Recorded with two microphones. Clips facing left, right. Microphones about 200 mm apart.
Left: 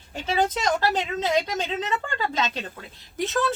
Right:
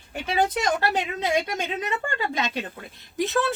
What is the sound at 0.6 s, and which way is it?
Speech, 15° right (ahead or behind).